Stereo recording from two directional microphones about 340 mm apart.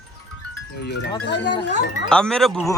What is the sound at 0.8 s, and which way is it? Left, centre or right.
Speech, left.